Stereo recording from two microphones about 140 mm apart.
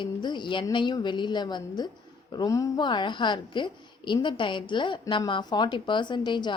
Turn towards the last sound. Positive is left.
turn(degrees=35)  # may be behind; listen again after turning